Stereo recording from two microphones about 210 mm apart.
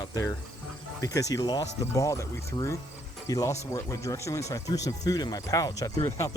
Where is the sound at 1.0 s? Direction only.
15° left (ahead or behind).